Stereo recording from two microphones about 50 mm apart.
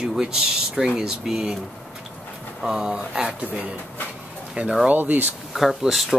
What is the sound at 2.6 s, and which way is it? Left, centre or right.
Speech, centre.